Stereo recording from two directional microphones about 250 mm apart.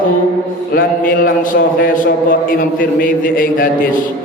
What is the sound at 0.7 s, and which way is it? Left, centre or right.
Mantra, left.